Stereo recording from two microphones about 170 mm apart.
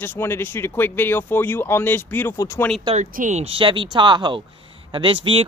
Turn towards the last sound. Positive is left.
turn(degrees=-30)  # may be behind; listen again after turning